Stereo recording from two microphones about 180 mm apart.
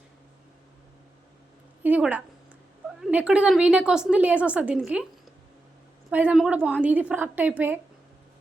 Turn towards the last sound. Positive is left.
turn(degrees=-10)  # may be behind; listen again after turning